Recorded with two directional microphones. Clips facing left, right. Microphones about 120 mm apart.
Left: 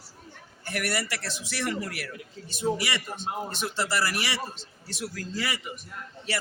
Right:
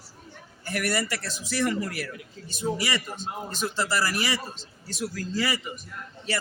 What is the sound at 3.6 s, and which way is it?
Speech, 40° right (ahead or behind).